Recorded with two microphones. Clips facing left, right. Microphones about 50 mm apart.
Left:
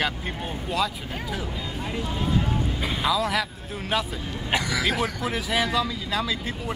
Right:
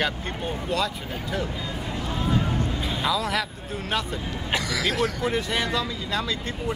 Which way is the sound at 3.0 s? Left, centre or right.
Centre.